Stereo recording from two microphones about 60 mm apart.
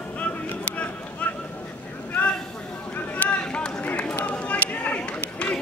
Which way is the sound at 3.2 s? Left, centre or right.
Centre.